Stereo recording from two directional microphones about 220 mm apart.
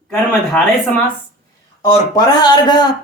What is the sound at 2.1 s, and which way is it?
Speech, 20° left (ahead or behind).